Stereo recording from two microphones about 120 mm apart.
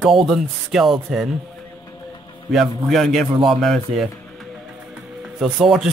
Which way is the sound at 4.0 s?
Centre (ahead or behind).